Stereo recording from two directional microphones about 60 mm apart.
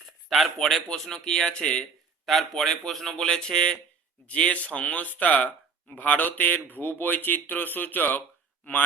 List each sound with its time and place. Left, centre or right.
0.3 s a man's voice: centre
1.8 s speech: centre; by 8.2 s left